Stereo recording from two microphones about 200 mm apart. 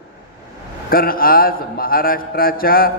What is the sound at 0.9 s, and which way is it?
A man's voice, 45° left (ahead or behind).